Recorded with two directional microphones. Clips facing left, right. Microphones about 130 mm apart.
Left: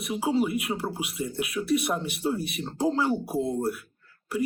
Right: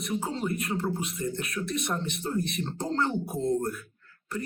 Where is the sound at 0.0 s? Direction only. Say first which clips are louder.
Left 5 dB; 5° left (ahead or behind).